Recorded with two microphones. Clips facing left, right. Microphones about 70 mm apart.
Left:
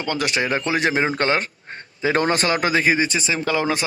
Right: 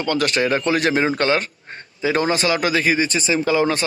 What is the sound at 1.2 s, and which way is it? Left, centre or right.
Speech, left.